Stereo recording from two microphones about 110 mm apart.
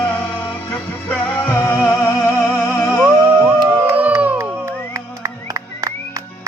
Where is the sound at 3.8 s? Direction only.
15° right (ahead or behind).